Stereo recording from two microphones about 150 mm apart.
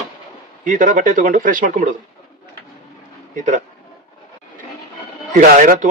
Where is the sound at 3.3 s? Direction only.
55° right (ahead or behind).